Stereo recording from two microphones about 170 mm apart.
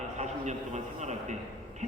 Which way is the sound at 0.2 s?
40° right (ahead or behind).